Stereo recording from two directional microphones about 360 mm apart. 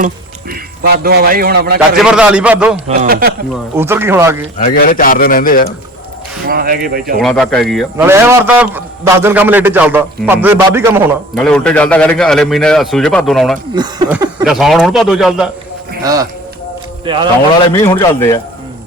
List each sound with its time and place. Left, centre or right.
0.8 s a man's voice: right
2.0 s a man's voice: centre
2.8 s a man's voice: right
3.5 s speech: centre
4.5 s a man's voice: left
6.5 s a man's voice: right
7.2 s a man's voice: centre
13.7 s a man's voice: centre
17.1 s speech: centre
17.7 s a man's voice: centre